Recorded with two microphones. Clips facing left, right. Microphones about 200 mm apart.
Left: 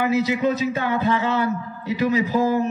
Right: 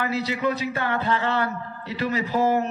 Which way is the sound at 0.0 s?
20° left (ahead or behind).